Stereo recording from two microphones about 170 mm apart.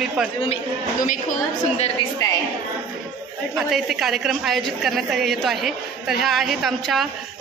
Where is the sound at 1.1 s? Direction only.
50° left (ahead or behind).